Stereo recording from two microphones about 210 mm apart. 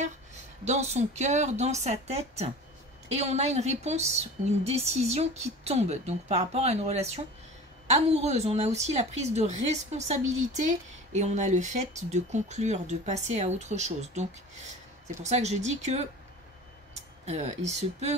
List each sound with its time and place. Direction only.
0.7 s a woman's voice: 30° right (ahead or behind)
17.3 s a woman's voice: 30° right (ahead or behind)